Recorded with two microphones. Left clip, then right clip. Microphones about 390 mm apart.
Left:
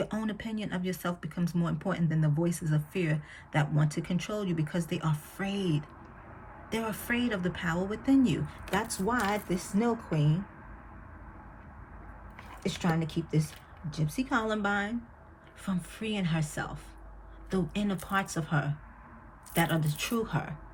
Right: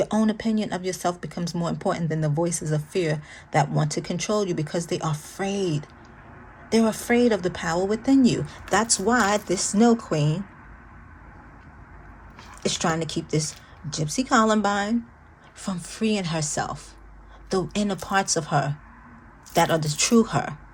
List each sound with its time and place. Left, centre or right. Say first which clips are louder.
0.0 s speech: right 11 dB; centre
6.7 s a woman's voice: right 11 dB; centre
12.6 s a woman's voice: right 8 dB; right